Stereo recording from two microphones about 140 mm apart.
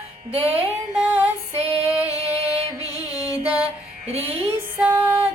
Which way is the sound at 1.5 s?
45° right (ahead or behind).